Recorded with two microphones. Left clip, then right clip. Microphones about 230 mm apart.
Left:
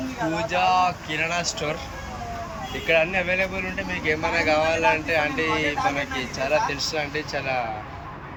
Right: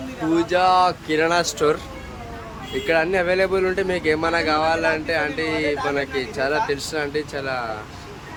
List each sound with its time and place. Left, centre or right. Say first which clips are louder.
0.3 s speech: right 4 dB; centre
2.8 s speech: right 2 dB; centre